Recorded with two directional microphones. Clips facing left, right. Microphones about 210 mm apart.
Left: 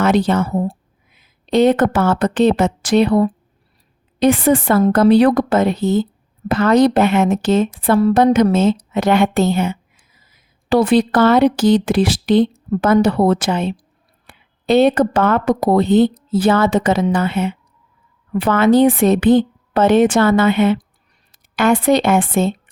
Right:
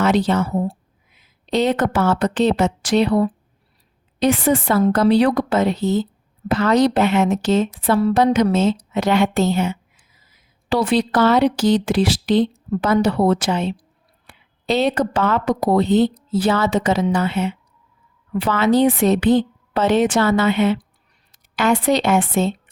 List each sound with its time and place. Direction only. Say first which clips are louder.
0.0 s a woman's voice: left 2 dB; 55° left (ahead or behind)